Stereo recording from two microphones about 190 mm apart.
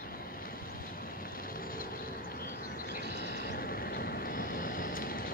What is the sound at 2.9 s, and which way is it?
Vehicle, 55° left (ahead or behind).